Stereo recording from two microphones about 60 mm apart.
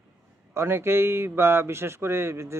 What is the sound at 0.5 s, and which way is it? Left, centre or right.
Speech, right.